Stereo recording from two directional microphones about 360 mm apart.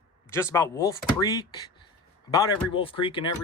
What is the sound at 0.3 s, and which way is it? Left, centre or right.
Speech, centre.